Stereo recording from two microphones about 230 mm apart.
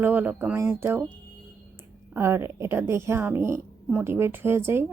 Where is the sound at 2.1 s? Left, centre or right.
Centre.